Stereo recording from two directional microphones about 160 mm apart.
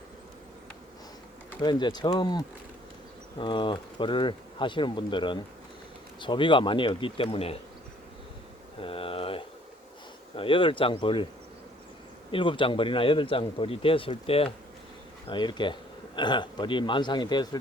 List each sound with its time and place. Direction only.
1.6 s speech: 25° left (ahead or behind)
8.8 s a sound: 35° left (ahead or behind)
10.3 s speech: 35° left (ahead or behind)
12.3 s speech: 30° left (ahead or behind)